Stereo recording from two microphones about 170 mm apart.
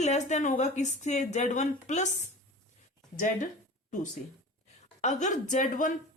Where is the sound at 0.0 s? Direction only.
45° left (ahead or behind).